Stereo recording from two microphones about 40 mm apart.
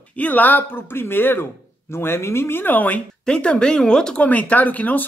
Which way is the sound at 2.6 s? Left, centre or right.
Left.